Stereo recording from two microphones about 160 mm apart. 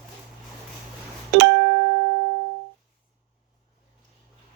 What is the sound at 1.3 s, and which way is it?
Music, 90° right.